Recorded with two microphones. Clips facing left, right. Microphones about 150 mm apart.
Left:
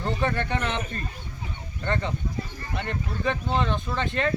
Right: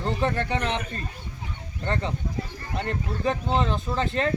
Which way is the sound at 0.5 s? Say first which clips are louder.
Right 1 dB; 35° right (ahead or behind).